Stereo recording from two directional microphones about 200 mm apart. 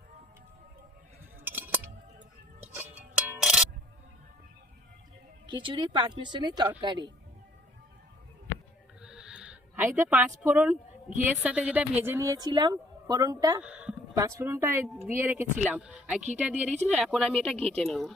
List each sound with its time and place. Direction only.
1.5 s scissors: 10° right (ahead or behind)
2.7 s music: 10° right (ahead or behind)
5.5 s speech: 25° right (ahead or behind)
9.0 s a sound: 5° right (ahead or behind)
11.2 s speech: 5° right (ahead or behind)
13.6 s a sound: 5° right (ahead or behind)
14.2 s a woman's voice: 15° right (ahead or behind); by 18.1 s centre (ahead or behind)